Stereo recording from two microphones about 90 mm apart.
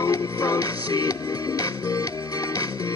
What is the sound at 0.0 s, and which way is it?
Music, 40° left (ahead or behind).